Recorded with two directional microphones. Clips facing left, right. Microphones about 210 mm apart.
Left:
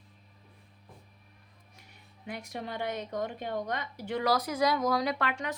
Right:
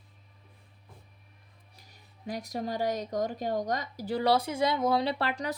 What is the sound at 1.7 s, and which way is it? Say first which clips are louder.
Speech: left 1 dB; 35° right (ahead or behind).